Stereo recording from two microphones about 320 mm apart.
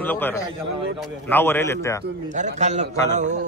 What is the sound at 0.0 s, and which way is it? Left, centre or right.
A man's voice, centre.